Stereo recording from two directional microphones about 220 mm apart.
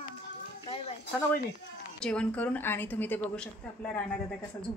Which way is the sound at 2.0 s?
5° left (ahead or behind).